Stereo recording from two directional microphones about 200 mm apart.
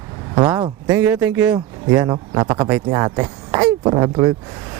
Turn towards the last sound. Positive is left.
turn(degrees=-20)  # may be behind; listen again after turning